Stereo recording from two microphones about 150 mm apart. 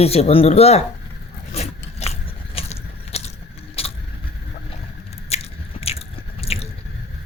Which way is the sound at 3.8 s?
40° left (ahead or behind).